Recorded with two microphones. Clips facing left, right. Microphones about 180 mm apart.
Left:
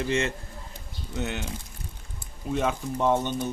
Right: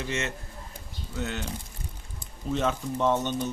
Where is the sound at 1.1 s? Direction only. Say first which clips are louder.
Left 2 dB; 20° left (ahead or behind).